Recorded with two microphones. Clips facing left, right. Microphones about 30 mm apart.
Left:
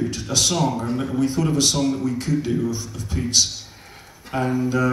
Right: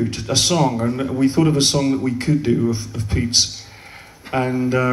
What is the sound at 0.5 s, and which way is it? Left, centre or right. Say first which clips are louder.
Speech: right 4 dB; right.